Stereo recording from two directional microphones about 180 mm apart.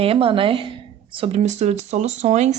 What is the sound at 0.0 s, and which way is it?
A woman's voice, 30° right (ahead or behind).